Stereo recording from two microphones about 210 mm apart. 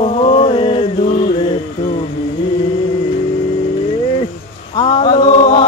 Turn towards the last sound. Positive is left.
turn(degrees=25)  # may be behind; listen again after turning